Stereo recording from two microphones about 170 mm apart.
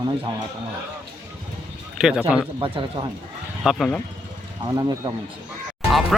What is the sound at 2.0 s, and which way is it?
Speech, 5° right (ahead or behind).